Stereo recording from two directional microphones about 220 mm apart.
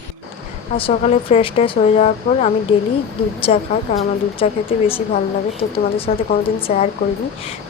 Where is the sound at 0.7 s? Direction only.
25° left (ahead or behind).